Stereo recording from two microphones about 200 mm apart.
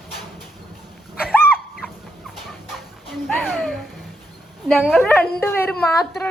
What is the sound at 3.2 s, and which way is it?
A woman's voice, centre (ahead or behind).